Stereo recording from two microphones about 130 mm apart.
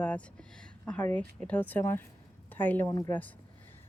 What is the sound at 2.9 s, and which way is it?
Speech, 25° left (ahead or behind).